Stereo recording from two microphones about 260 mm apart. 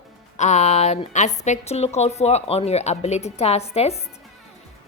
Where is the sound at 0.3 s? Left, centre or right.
Left.